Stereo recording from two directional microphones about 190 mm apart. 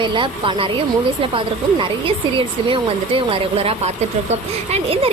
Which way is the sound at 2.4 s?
25° right (ahead or behind).